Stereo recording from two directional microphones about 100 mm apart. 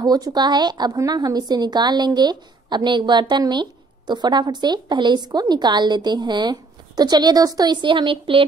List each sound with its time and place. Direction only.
0.0 s a woman's voice: 40° right (ahead or behind); by 8.5 s 60° right (ahead or behind)